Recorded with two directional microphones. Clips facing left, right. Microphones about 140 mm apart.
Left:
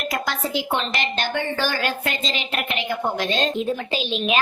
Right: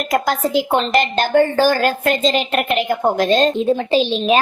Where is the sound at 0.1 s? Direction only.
45° right (ahead or behind).